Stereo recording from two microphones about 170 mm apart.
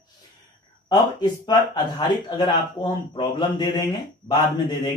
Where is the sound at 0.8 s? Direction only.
25° left (ahead or behind).